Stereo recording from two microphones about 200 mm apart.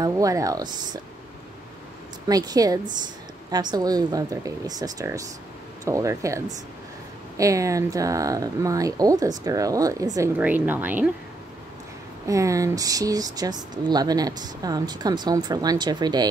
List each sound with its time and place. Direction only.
0.0 s speech: 15° right (ahead or behind)
2.2 s speech: 20° right (ahead or behind)
12.3 s speech: 15° right (ahead or behind)